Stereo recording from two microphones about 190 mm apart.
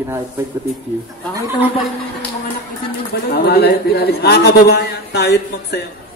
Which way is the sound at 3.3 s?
55° left (ahead or behind).